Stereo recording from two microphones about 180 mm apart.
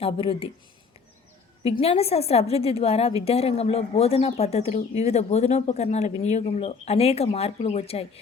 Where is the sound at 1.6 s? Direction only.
35° left (ahead or behind).